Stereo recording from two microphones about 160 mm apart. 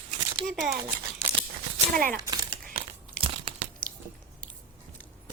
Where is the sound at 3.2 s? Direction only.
35° right (ahead or behind).